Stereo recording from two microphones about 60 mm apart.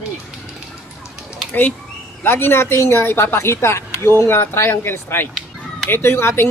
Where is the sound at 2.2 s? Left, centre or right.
Left.